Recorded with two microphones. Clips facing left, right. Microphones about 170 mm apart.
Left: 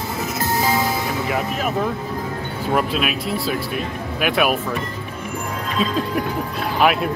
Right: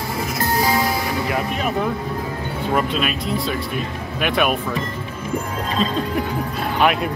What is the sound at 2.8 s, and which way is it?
Speech, 5° left (ahead or behind).